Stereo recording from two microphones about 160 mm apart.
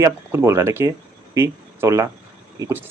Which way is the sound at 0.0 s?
15° right (ahead or behind).